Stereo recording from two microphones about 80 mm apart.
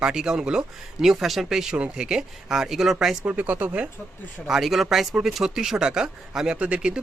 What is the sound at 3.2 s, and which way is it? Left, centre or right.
Speech, centre.